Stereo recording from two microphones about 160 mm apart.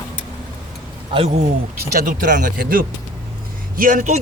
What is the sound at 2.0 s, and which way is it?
A man's voice, 55° right (ahead or behind).